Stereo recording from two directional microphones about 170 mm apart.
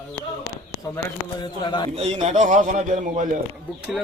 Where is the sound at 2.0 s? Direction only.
40° right (ahead or behind).